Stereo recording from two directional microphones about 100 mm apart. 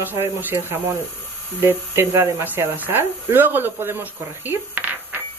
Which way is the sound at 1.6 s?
25° right (ahead or behind).